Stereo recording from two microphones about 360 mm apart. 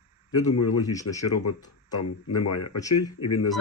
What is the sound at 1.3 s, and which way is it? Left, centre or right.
Speech, left.